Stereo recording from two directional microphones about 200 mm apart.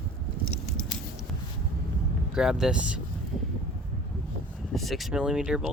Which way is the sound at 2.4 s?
5° right (ahead or behind).